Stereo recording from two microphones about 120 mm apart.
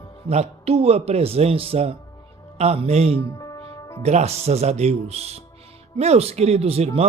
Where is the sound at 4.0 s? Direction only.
65° right (ahead or behind).